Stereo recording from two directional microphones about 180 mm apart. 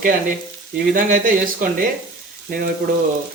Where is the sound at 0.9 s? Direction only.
50° right (ahead or behind).